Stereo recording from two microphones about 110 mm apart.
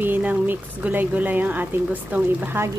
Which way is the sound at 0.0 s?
15° right (ahead or behind).